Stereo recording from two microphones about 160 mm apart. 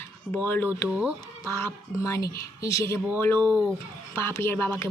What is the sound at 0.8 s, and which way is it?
Speech, 5° right (ahead or behind).